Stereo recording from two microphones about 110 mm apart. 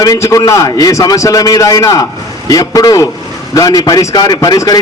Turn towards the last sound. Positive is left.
turn(degrees=35)  # may be behind; listen again after turning